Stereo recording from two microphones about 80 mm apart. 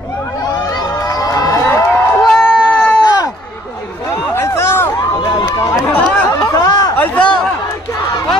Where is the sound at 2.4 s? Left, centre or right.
Left.